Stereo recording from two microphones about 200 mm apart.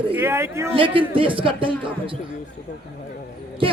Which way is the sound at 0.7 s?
25° right (ahead or behind).